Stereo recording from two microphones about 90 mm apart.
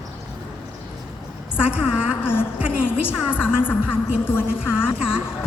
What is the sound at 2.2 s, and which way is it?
Speech, 25° left (ahead or behind).